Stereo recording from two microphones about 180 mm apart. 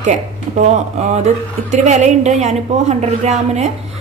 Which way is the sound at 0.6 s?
40° right (ahead or behind).